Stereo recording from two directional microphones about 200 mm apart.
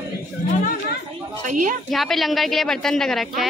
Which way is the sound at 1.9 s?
Centre (ahead or behind).